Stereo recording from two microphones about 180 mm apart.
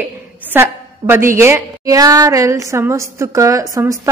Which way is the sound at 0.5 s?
10° right (ahead or behind).